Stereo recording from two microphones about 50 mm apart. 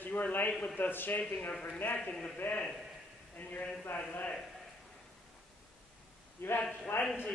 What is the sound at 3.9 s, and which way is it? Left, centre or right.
Speech, left.